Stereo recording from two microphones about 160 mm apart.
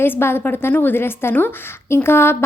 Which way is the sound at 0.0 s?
15° left (ahead or behind).